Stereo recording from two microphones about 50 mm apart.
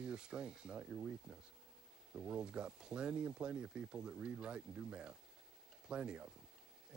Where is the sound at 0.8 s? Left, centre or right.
Right.